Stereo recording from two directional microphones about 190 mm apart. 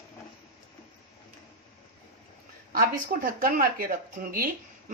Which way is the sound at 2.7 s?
50° right (ahead or behind).